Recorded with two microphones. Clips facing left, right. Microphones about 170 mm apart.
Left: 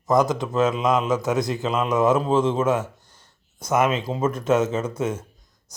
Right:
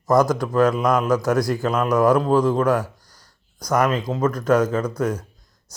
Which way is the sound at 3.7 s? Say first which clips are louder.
Right 1 dB; 25° left (ahead or behind).